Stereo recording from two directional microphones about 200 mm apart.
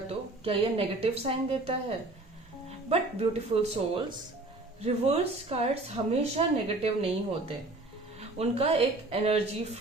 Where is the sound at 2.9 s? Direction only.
30° right (ahead or behind).